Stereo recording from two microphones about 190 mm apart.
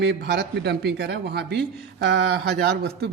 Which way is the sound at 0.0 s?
60° right (ahead or behind).